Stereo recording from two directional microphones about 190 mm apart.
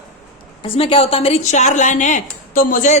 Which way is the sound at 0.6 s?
30° left (ahead or behind).